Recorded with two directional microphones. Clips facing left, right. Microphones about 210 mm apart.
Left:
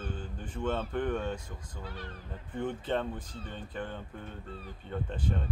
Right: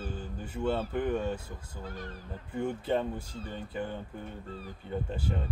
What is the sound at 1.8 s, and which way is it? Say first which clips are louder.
Speech: right 2 dB; 45° right (ahead or behind).